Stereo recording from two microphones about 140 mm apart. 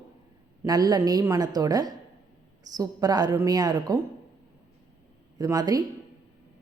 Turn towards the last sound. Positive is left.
turn(degrees=-25)  # may be behind; listen again after turning